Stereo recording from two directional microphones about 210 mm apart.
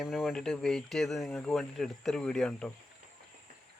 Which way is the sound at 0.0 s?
Centre (ahead or behind).